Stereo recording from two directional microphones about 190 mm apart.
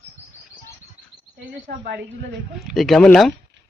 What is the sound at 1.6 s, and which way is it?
Speech, 45° right (ahead or behind).